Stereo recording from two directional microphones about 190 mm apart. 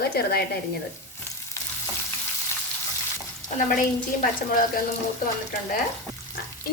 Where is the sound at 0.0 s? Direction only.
55° left (ahead or behind).